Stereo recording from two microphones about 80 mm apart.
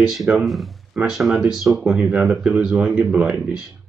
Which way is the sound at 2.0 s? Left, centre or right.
Centre.